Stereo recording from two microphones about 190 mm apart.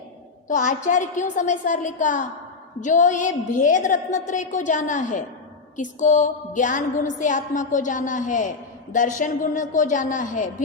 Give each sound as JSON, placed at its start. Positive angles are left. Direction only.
{"t": 0.4, "sound": "music", "side_deg": 40}
{"t": 2.8, "sound": "a woman's voice", "side_deg": 40}
{"t": 5.7, "sound": "music", "side_deg": 40}